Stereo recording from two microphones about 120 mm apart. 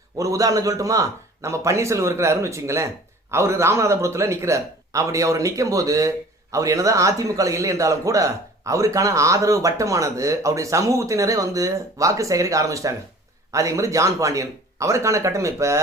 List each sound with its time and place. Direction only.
0.2 s a man's voice: 30° right (ahead or behind)